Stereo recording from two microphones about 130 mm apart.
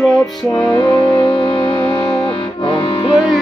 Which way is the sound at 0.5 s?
35° left (ahead or behind).